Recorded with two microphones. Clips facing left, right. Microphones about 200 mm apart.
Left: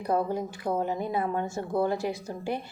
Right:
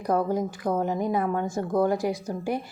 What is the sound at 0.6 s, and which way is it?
A woman's voice, 45° right (ahead or behind).